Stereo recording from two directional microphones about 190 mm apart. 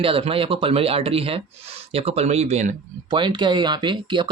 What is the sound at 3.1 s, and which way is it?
Speech, 25° right (ahead or behind).